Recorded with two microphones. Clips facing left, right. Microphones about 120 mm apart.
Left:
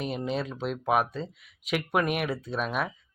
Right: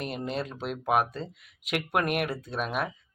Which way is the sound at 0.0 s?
Centre (ahead or behind).